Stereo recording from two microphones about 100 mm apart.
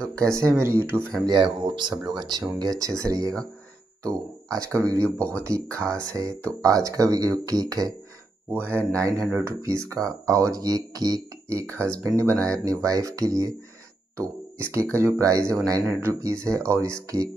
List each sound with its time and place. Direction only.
0.1 s speech: 30° right (ahead or behind)
1.2 s speech: 50° right (ahead or behind)
4.5 s speech: 35° right (ahead or behind)
8.5 s speech: 20° right (ahead or behind)
14.7 s speech: 30° right (ahead or behind)
15.9 s speech: 20° right (ahead or behind)